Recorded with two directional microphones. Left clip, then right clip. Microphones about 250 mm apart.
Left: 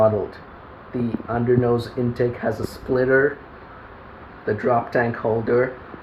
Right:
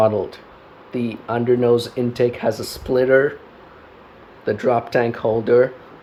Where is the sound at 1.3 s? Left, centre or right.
Right.